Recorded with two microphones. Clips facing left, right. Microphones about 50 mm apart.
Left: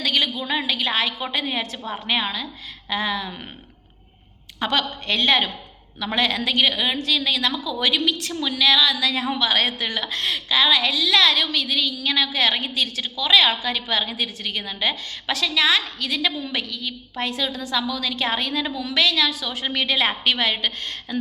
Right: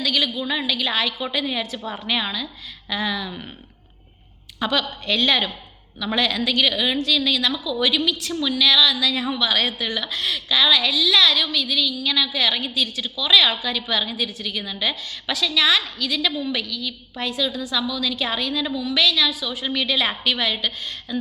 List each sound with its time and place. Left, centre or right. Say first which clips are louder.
0.0 s a woman's voice: even; left
4.6 s a woman's voice: even; left
14.6 s a woman's voice: left 1 dB; left